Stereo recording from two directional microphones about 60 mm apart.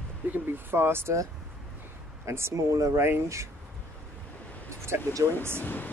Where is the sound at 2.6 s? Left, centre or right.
Right.